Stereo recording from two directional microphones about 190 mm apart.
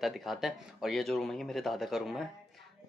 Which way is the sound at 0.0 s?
Centre (ahead or behind).